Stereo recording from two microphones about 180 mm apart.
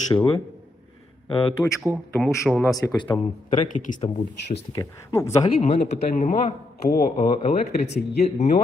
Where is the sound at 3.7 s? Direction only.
45° left (ahead or behind).